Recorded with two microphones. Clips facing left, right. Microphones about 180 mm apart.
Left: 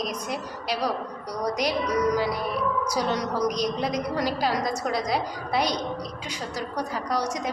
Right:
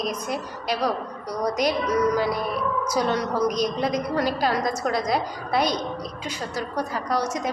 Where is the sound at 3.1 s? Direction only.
15° left (ahead or behind).